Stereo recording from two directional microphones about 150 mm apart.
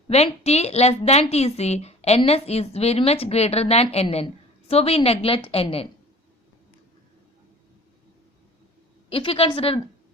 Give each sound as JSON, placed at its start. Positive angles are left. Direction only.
{"t": 0.1, "sound": "a woman's voice", "side_deg": 45}
{"t": 9.0, "sound": "a woman's voice", "side_deg": 40}